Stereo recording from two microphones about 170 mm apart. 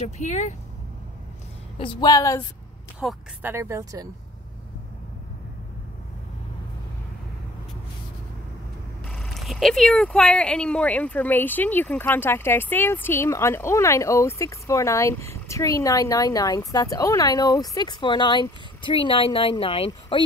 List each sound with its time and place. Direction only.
0.2 s speech: 45° left (ahead or behind)
1.8 s a woman's voice: 25° left (ahead or behind)
3.0 s speech: centre (ahead or behind)
3.4 s speech: 15° right (ahead or behind)
9.0 s speech: centre (ahead or behind); by 20.2 s 35° left (ahead or behind)